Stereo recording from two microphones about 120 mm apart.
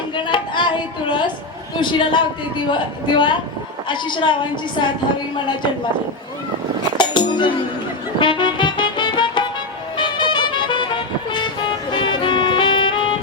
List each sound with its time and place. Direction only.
0.2 s a woman's voice: 40° left (ahead or behind)
7.0 s music: 40° left (ahead or behind)